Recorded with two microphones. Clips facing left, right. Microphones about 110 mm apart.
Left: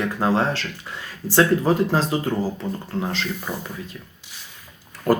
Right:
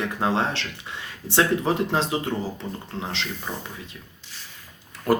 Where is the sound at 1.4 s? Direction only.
35° left (ahead or behind).